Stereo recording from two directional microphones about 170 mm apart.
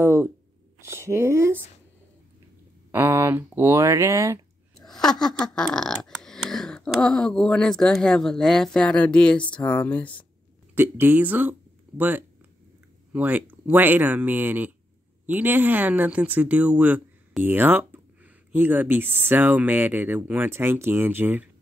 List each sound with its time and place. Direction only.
0.0 s speech: 15° right (ahead or behind)
2.9 s speech: 15° right (ahead or behind)
4.8 s a sound: 5° left (ahead or behind)
5.8 s speech: 5° left (ahead or behind)
10.7 s speech: 10° right (ahead or behind)